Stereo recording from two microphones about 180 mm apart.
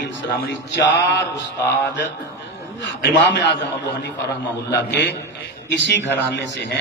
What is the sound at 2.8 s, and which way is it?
Speech, 80° left.